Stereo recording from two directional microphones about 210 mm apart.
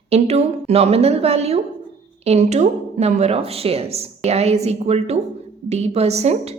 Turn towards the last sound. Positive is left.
turn(degrees=-30)  # may be behind; listen again after turning